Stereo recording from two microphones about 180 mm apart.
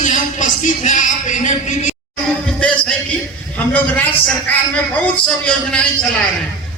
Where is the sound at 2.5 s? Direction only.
5° left (ahead or behind).